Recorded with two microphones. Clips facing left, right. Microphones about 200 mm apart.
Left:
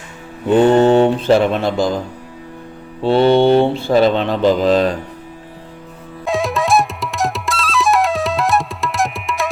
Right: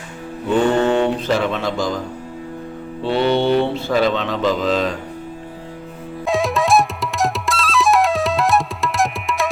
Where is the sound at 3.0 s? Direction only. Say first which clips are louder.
Left 5 dB; 30° left (ahead or behind).